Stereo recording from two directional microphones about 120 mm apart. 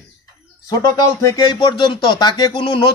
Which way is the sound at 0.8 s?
30° left (ahead or behind).